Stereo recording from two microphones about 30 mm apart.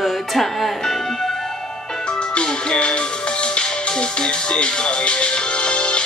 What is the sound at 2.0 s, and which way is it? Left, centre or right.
Music, left.